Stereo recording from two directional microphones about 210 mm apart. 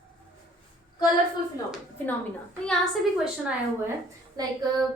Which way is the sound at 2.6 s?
Centre (ahead or behind).